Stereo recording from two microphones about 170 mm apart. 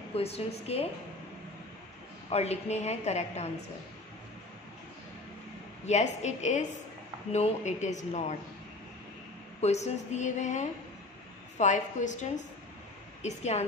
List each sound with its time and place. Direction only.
0.1 s a woman's voice: 35° left (ahead or behind)
2.2 s a woman's voice: 40° left (ahead or behind)
5.9 s speech: 40° left (ahead or behind)
9.6 s a woman's voice: 40° left (ahead or behind)